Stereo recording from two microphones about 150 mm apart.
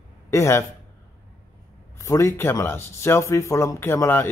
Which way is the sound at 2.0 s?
20° left (ahead or behind).